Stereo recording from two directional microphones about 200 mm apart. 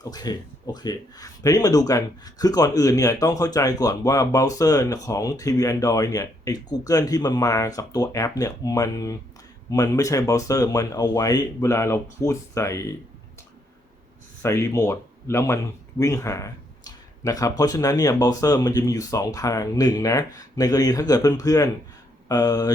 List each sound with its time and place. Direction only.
0.0 s speech: 20° left (ahead or behind)
14.4 s speech: 15° left (ahead or behind)